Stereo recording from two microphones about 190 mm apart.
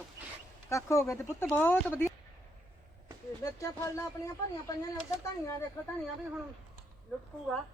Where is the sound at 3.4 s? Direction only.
15° left (ahead or behind).